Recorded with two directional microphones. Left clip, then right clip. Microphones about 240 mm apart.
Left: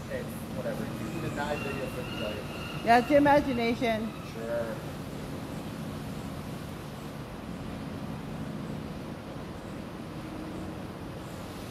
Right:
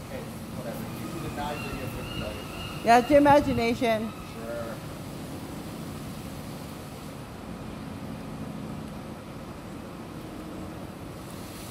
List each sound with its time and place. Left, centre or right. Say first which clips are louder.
2.9 s a woman's voice: right 3 dB; centre